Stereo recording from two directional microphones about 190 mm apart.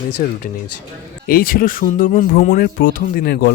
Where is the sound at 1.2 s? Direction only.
50° left (ahead or behind).